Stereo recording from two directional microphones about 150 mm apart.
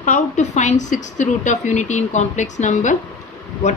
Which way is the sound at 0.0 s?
55° left (ahead or behind).